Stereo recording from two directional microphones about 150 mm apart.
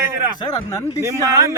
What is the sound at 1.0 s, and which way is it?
Speech, 20° right (ahead or behind).